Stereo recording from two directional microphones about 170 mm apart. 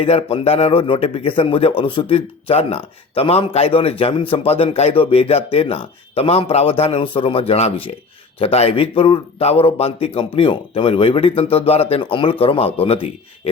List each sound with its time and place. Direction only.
0.0 s a man's voice: 35° left (ahead or behind)